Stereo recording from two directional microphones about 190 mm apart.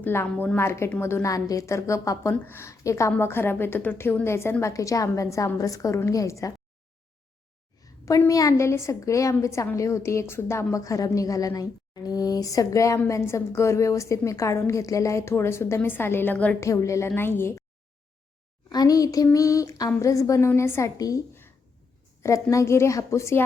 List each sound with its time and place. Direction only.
0.0 s a woman's voice: 10° left (ahead or behind)
7.8 s a woman's voice: 15° left (ahead or behind)
18.7 s a woman's voice: 20° left (ahead or behind)